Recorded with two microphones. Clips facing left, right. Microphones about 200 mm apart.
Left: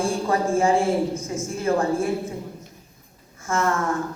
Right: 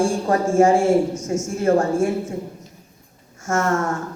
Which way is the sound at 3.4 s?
45° right (ahead or behind).